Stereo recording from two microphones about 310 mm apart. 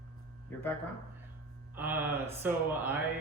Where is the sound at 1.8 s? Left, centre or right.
Centre.